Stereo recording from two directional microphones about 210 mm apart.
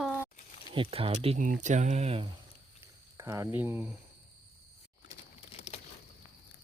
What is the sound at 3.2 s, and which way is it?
Speech, 15° right (ahead or behind).